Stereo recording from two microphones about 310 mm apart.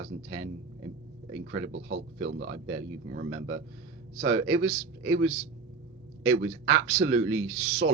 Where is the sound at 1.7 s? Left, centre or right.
Right.